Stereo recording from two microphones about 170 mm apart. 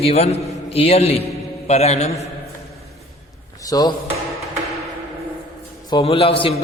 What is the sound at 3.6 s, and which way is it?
Speech, 20° left (ahead or behind).